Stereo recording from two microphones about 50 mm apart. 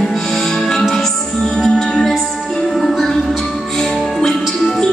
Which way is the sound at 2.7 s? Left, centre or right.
Centre.